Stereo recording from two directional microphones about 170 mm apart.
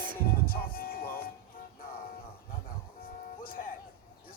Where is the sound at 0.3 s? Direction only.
60° left (ahead or behind).